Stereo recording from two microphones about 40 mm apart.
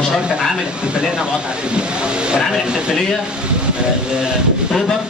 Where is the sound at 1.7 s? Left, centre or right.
Right.